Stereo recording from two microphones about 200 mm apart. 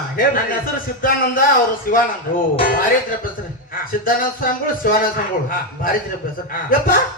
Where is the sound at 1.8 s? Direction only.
45° left (ahead or behind).